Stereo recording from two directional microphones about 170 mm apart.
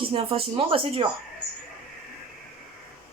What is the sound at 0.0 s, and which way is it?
Speech, 30° right (ahead or behind).